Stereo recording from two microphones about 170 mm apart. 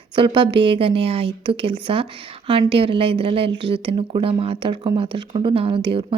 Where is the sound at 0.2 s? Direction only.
30° right (ahead or behind).